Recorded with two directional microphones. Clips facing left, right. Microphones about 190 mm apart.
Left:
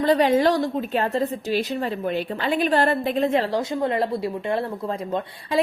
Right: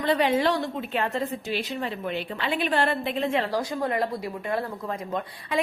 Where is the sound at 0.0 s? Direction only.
40° left (ahead or behind).